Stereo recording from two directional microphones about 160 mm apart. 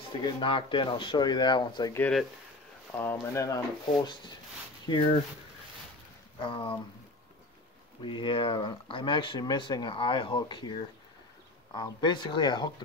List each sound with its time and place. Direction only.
0.2 s speech: 30° left (ahead or behind)
2.0 s speech: 5° left (ahead or behind)
4.8 s speech: 30° left (ahead or behind)
6.4 s speech: 30° left (ahead or behind)
8.0 s speech: 30° left (ahead or behind)